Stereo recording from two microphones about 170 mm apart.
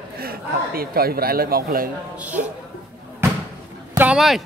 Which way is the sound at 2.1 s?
10° right (ahead or behind).